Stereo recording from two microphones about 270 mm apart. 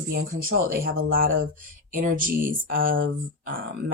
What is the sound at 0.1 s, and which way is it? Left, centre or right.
Speech, right.